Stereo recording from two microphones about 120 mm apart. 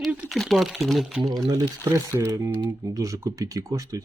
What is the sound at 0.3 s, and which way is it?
Speech, centre (ahead or behind).